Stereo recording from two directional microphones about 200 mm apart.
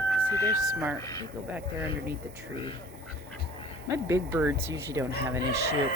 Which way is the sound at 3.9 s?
15° right (ahead or behind).